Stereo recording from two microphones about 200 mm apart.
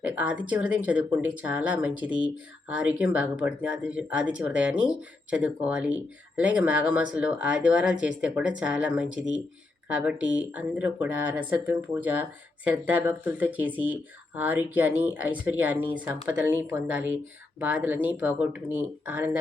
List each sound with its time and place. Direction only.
0.0 s speech: 5° right (ahead or behind)